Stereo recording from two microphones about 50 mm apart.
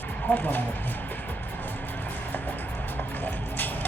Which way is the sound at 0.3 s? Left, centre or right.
Left.